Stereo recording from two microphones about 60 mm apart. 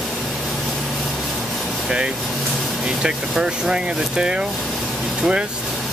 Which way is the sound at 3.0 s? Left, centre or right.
Centre.